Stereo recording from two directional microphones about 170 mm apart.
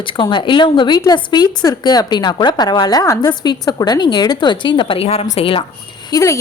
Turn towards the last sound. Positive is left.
turn(degrees=20)  # may be behind; listen again after turning